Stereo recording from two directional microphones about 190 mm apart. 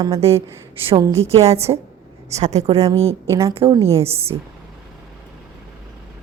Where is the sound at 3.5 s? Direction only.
30° right (ahead or behind).